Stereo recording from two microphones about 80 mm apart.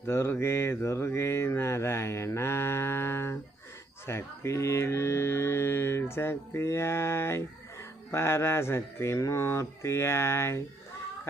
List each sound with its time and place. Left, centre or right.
0.0 s mantra: left
4.0 s speech: left